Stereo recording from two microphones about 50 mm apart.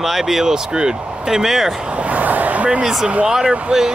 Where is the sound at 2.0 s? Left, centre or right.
Right.